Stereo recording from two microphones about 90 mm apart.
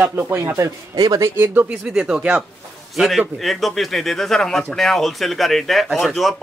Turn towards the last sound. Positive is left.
turn(degrees=0)  # may be behind; listen again after turning